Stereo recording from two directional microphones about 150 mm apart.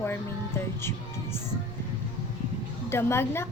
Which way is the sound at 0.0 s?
15° left (ahead or behind).